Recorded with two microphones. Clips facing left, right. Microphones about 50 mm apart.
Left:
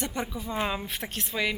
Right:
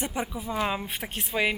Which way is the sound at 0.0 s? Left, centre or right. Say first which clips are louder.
Right 1 dB; centre.